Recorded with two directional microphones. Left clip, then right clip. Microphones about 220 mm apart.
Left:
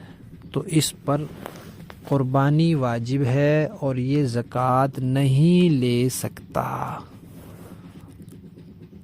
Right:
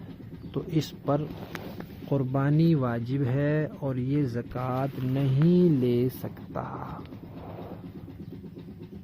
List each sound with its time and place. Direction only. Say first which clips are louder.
0.5 s speech: left 7 dB; 50° left (ahead or behind)
2.0 s speech: left 7 dB; 35° left (ahead or behind)
4.5 s speech: left 13 dB; 50° left (ahead or behind)